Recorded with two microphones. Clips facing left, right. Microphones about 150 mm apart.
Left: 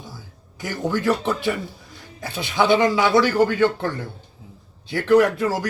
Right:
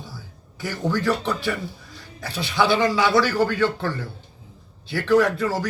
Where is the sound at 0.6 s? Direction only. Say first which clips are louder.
Left 1 dB; 15° left (ahead or behind).